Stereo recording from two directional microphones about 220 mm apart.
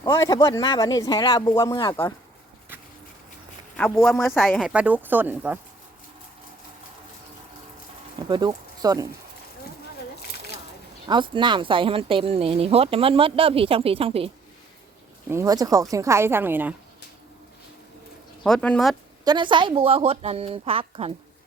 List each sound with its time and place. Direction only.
0.0 s speech: 15° left (ahead or behind)
3.8 s speech: 5° left (ahead or behind)
8.3 s speech: 20° right (ahead or behind)
11.1 s speech: 20° right (ahead or behind)
15.3 s speech: 15° right (ahead or behind)
18.4 s speech: 5° left (ahead or behind)
19.2 s speech: 20° right (ahead or behind)